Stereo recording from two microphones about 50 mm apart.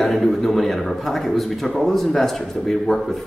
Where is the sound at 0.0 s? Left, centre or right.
Centre.